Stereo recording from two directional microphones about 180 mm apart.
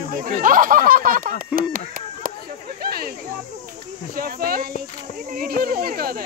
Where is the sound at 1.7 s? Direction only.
50° right (ahead or behind).